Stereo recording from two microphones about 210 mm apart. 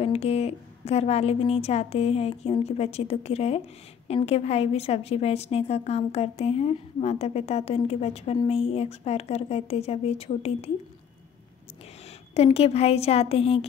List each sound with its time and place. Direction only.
0.0 s a woman's voice: 30° left (ahead or behind)
12.4 s a woman's voice: 30° left (ahead or behind)